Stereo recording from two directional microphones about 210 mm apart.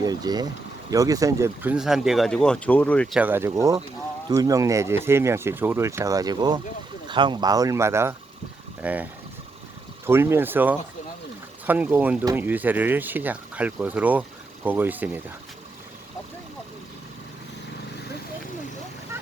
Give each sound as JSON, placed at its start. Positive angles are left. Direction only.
{"t": 0.0, "sound": "speech", "side_deg": -20}
{"t": 3.2, "sound": "speech", "side_deg": -10}
{"t": 10.1, "sound": "speech", "side_deg": -10}